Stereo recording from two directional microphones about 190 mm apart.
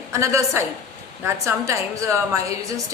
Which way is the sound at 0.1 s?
15° right (ahead or behind).